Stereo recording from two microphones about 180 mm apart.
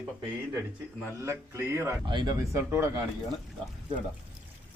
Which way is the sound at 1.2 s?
15° right (ahead or behind).